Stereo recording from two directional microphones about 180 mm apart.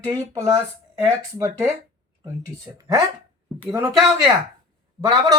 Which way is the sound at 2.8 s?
20° right (ahead or behind).